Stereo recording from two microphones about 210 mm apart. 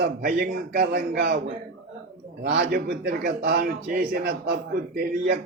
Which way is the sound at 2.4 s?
50° right (ahead or behind).